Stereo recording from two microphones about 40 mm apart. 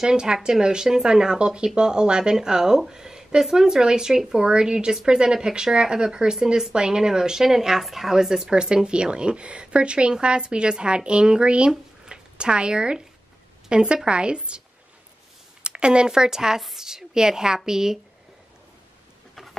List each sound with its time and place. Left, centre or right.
0.0 s speech: centre
11.7 s a sound: centre
13.7 s a woman's voice: right
15.6 s a woman's voice: right